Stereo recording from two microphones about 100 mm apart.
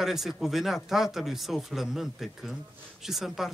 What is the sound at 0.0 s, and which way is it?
Speech, 5° right (ahead or behind).